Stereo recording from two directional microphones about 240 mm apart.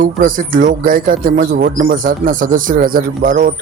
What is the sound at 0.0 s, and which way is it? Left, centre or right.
Speech, right.